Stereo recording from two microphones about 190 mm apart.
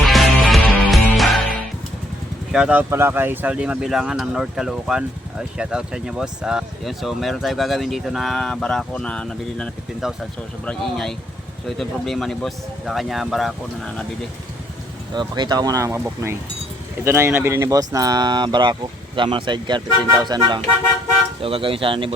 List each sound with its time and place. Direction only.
0.0 s music: centre (ahead or behind)
2.5 s speech: 5° right (ahead or behind)
15.1 s speech: 25° right (ahead or behind)